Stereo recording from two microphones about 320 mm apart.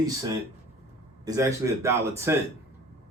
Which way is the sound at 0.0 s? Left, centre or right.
Centre.